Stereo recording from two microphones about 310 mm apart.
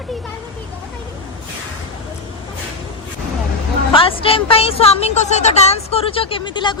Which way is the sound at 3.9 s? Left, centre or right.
Centre.